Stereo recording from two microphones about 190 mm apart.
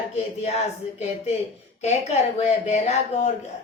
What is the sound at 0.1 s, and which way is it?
A woman's voice, 35° left (ahead or behind).